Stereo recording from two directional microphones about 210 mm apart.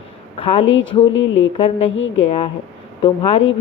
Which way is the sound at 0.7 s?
65° left (ahead or behind).